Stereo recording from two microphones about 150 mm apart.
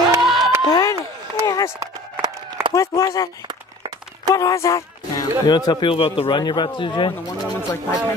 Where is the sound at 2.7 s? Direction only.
20° left (ahead or behind).